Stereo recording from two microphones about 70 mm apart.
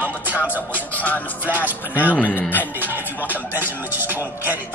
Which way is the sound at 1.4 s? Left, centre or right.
Right.